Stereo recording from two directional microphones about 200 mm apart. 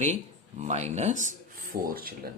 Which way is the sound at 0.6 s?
35° right (ahead or behind).